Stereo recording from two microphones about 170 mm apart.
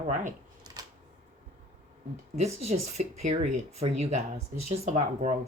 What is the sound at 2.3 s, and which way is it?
Speech, 40° right (ahead or behind).